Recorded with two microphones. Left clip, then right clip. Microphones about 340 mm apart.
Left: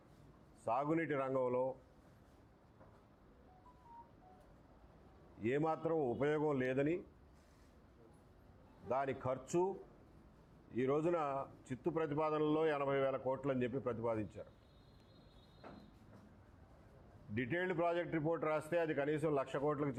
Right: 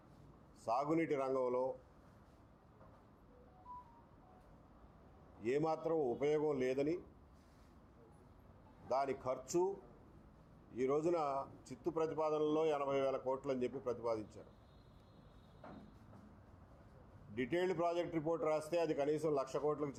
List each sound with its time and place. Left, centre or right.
0.6 s a man's voice: left
5.4 s a man's voice: left
8.9 s a man's voice: left
10.8 s a man's voice: left
17.3 s a man's voice: left